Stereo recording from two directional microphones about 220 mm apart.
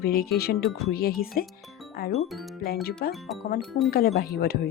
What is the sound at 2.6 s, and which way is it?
Speech, 45° left (ahead or behind).